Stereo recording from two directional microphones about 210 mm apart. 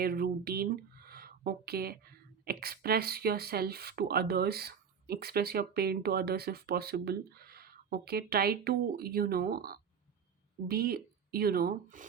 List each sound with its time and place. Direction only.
0.0 s speech: 45° right (ahead or behind)